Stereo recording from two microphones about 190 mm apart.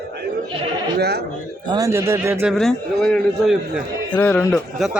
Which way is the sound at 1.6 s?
20° right (ahead or behind).